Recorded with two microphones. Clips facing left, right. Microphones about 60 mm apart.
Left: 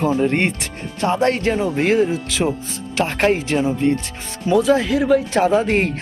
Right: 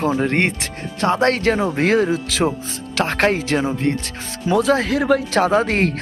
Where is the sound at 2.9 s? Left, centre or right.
Right.